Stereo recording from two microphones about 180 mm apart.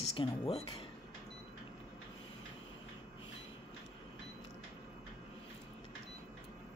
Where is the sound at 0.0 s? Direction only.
30° left (ahead or behind).